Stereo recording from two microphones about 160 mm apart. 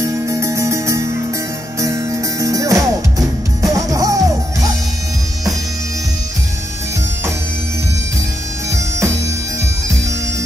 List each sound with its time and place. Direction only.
0.0 s music: 20° right (ahead or behind)
8.6 s bagpipes: 20° right (ahead or behind)